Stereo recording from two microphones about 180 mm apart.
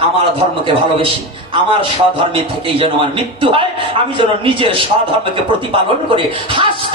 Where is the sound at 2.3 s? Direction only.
30° right (ahead or behind).